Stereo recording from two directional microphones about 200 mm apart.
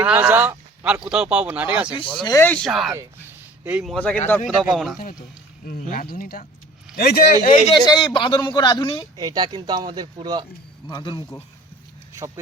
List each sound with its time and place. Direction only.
0.0 s speech: 10° right (ahead or behind)
2.2 s speech: 15° left (ahead or behind)
2.9 s a sound: 15° right (ahead or behind)
3.9 s speech: 5° left (ahead or behind)
5.6 s speech: 40° left (ahead or behind)
7.7 s speech: 25° left (ahead or behind)
9.1 s speech: 20° right (ahead or behind)
10.8 s speech: 25° left (ahead or behind)